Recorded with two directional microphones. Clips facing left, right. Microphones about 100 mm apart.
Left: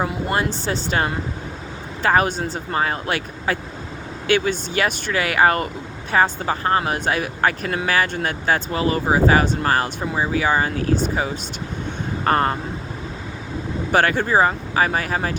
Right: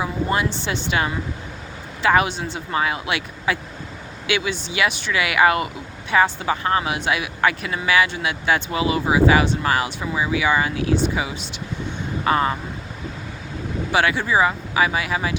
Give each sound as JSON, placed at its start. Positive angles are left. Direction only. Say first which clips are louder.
{"t": 0.0, "sound": "speech", "louder": "even", "side_deg": 40}
{"t": 13.9, "sound": "speech", "louder": "left 2 dB", "side_deg": 50}